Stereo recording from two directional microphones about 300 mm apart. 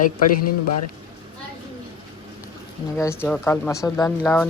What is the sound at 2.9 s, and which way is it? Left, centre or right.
Speech, centre.